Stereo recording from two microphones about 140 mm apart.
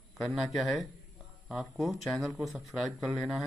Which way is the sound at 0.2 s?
Centre (ahead or behind).